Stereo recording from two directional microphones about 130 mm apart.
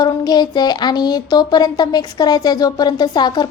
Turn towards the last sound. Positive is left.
turn(degrees=35)  # may be behind; listen again after turning